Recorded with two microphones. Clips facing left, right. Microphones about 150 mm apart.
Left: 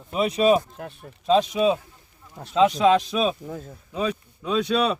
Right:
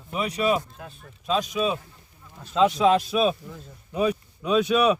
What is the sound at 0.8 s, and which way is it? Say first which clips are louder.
Speech: left 5 dB; 65° left (ahead or behind).